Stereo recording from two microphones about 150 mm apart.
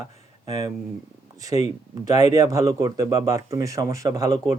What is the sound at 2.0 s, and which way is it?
Speech, 25° right (ahead or behind).